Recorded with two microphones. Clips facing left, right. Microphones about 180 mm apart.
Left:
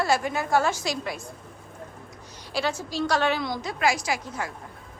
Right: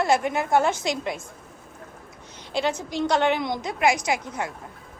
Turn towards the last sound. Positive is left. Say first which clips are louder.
# right 3 dB
turn(degrees=-20)  # may be behind; listen again after turning